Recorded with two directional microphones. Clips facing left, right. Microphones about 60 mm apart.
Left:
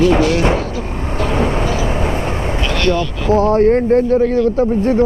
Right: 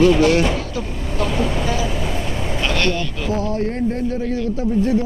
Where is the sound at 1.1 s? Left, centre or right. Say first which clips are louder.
Left 4 dB; left.